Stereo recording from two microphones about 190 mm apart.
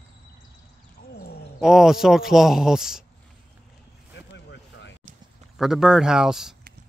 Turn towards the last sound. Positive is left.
turn(degrees=0)  # may be behind; listen again after turning